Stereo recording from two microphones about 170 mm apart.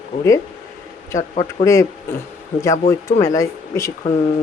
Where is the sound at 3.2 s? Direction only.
20° left (ahead or behind).